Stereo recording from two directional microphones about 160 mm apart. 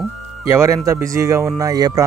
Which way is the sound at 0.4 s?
15° right (ahead or behind).